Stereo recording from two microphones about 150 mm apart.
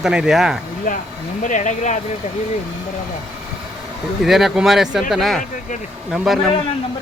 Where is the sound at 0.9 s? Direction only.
60° left (ahead or behind).